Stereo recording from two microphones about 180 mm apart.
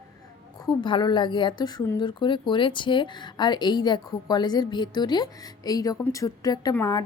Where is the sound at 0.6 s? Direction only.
25° left (ahead or behind).